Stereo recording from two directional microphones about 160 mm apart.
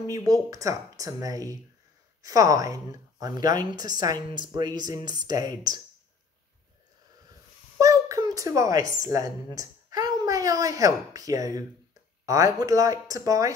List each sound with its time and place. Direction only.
0.0 s a woman's voice: 25° right (ahead or behind)
7.8 s a sound: 20° right (ahead or behind)
9.0 s a woman's voice: 20° right (ahead or behind)